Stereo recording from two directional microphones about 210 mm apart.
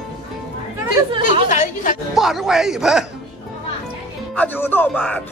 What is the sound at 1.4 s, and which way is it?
Speech, 40° left (ahead or behind).